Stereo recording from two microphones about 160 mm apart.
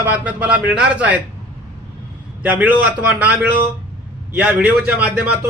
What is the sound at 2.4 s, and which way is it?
A man's voice, 10° right (ahead or behind).